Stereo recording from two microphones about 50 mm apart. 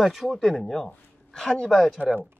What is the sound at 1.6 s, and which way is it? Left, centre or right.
Speech, centre.